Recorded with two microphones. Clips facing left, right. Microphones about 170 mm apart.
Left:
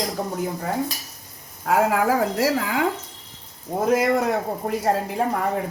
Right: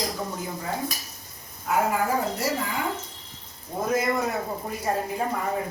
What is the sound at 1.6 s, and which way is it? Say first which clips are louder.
A woman's voice: left 5 dB; 90° left.